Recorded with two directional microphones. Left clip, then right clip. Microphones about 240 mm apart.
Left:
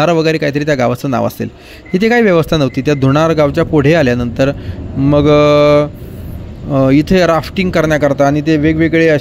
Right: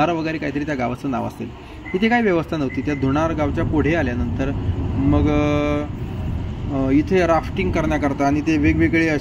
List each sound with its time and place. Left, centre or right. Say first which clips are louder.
0.0 s speech: left 9 dB; left